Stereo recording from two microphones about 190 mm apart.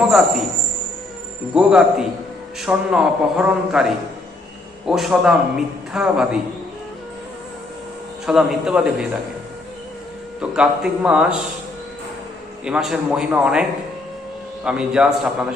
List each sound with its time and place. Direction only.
0.0 s a man's voice: centre (ahead or behind)
1.5 s a man's voice: 5° right (ahead or behind)
8.3 s a man's voice: centre (ahead or behind)
10.4 s a man's voice: 5° right (ahead or behind)
12.6 s a man's voice: 5° right (ahead or behind)